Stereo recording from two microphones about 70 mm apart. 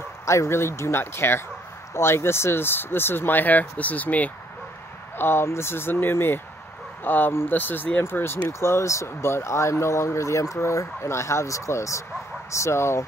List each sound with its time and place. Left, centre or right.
0.2 s speech: left
5.1 s speech: left